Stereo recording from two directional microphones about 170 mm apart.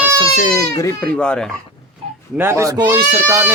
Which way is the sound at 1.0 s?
5° left (ahead or behind).